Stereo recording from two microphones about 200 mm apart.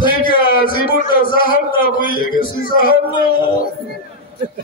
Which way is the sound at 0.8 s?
45° left (ahead or behind).